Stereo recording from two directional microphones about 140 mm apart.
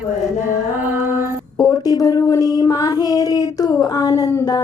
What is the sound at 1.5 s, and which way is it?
Child singing, 25° left (ahead or behind).